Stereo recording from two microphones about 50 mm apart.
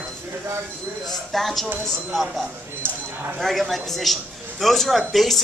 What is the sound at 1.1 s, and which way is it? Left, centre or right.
Speech, centre.